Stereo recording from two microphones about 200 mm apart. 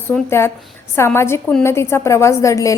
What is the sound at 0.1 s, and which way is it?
A woman's voice, 10° left (ahead or behind).